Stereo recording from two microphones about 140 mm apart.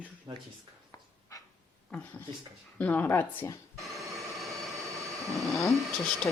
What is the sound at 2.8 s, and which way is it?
Speech, 10° left (ahead or behind).